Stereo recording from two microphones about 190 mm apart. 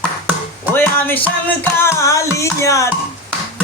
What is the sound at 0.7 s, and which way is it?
Music, 10° left (ahead or behind).